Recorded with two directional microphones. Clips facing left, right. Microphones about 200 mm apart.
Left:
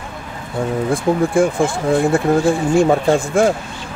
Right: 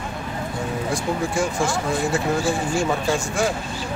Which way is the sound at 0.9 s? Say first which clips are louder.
Left 8 dB; 55° left (ahead or behind).